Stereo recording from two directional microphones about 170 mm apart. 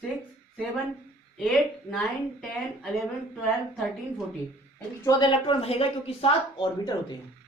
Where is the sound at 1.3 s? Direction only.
Centre (ahead or behind).